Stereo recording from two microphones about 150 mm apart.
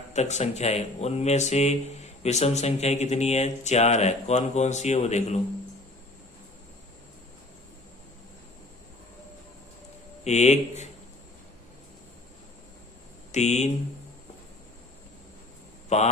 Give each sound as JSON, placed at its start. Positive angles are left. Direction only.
{"t": 0.1, "sound": "speech", "side_deg": 50}
{"t": 10.2, "sound": "speech", "side_deg": 50}
{"t": 13.3, "sound": "speech", "side_deg": 50}
{"t": 15.9, "sound": "speech", "side_deg": 50}